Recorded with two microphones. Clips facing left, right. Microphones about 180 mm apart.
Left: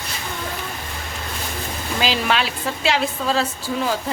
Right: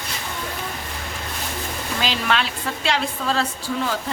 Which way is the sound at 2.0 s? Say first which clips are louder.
Left 3 dB; 5° left (ahead or behind).